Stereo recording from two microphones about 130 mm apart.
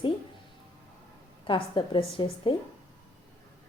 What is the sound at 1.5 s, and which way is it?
A woman's voice, 40° left (ahead or behind).